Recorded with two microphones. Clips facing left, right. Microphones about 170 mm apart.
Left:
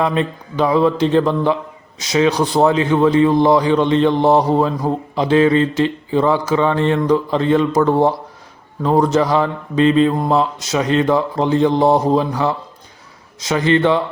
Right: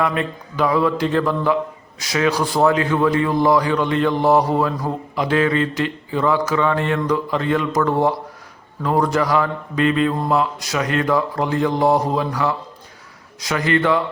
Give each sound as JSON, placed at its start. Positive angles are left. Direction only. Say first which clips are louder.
{"t": 0.0, "sound": "a man's voice", "louder": "left 3 dB", "side_deg": 25}